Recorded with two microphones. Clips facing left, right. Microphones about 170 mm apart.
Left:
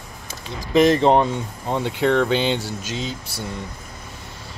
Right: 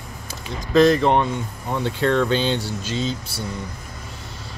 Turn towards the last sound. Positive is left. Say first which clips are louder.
# right 3 dB
turn(degrees=15)  # may be behind; listen again after turning